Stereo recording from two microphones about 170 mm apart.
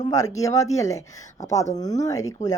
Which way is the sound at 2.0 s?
20° left (ahead or behind).